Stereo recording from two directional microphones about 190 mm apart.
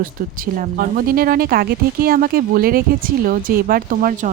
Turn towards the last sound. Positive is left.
turn(degrees=-45)  # may be behind; listen again after turning